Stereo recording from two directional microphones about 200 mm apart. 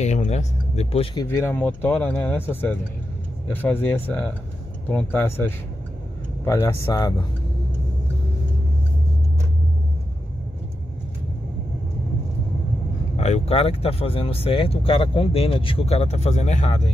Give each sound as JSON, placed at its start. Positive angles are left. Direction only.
{"t": 0.0, "sound": "speech", "side_deg": 35}
{"t": 1.1, "sound": "speech", "side_deg": 10}
{"t": 13.1, "sound": "speech", "side_deg": 35}